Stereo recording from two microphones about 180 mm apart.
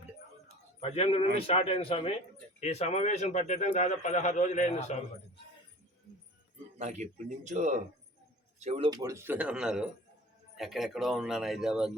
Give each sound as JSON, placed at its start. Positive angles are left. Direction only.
{"t": 0.4, "sound": "a sound", "side_deg": 35}
{"t": 1.5, "sound": "a man's voice", "side_deg": 35}
{"t": 6.7, "sound": "speech", "side_deg": -40}
{"t": 8.9, "sound": "speech", "side_deg": -20}